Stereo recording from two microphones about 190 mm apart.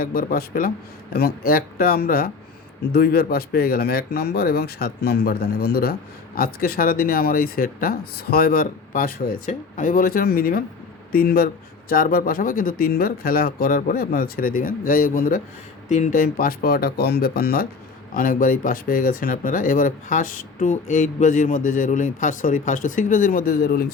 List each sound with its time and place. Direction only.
0.0 s speech: 50° left (ahead or behind)